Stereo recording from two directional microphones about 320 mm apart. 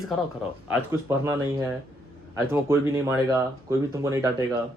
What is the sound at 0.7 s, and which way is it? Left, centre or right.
Speech, centre.